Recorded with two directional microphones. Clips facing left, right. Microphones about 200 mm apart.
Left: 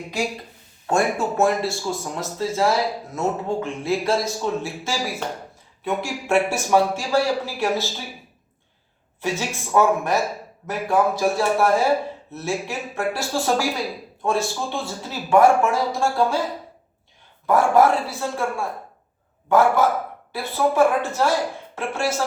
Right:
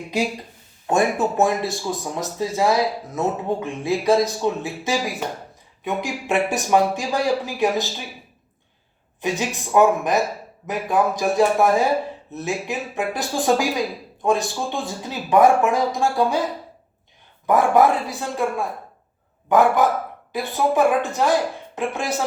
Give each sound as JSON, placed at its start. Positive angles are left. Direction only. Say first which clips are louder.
{"t": 0.9, "sound": "speech", "louder": "right 2 dB", "side_deg": -20}
{"t": 9.2, "sound": "speech", "louder": "right 2 dB", "side_deg": -15}
{"t": 17.4, "sound": "speech", "louder": "even", "side_deg": -15}